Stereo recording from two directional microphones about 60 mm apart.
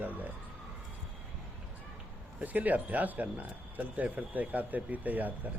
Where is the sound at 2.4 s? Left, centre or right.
Right.